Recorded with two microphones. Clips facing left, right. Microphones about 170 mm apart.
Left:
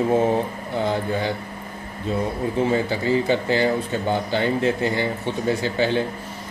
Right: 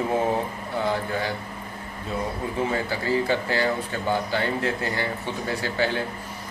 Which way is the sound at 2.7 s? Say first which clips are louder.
Left 5 dB; 20° left (ahead or behind).